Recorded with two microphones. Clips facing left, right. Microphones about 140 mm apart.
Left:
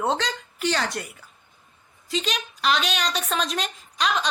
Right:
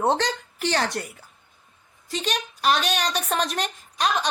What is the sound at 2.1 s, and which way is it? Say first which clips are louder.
Speech: even; 55° right (ahead or behind).